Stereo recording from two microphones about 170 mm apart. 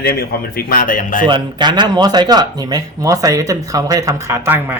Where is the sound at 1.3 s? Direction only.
25° right (ahead or behind).